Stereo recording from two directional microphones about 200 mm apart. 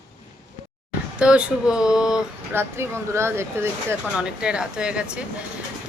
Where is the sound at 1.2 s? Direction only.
5° right (ahead or behind).